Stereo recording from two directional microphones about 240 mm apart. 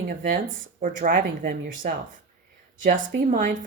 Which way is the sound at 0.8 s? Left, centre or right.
Right.